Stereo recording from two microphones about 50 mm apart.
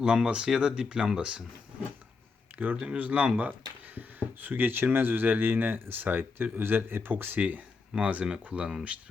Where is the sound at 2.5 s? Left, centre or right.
Right.